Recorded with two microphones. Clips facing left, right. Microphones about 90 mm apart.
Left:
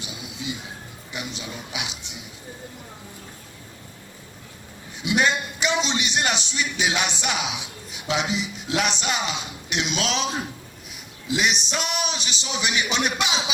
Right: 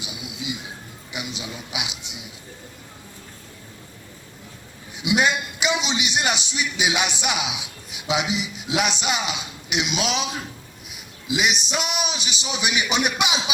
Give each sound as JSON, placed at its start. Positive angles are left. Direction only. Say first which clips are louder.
{"t": 0.0, "sound": "music", "louder": "even", "side_deg": -15}
{"t": 1.1, "sound": "speech", "louder": "right 1 dB", "side_deg": -15}
{"t": 4.9, "sound": "speech", "louder": "right 1 dB", "side_deg": -15}
{"t": 11.3, "sound": "speech", "louder": "right 1 dB", "side_deg": -10}